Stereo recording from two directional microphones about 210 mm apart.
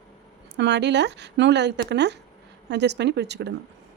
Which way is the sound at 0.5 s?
55° right (ahead or behind).